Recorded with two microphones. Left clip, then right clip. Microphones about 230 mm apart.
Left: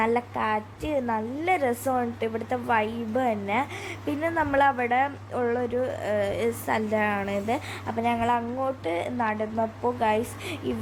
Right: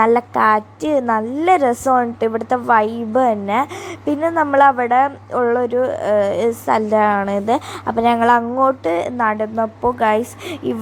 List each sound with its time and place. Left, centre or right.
0.0 s a woman's voice: right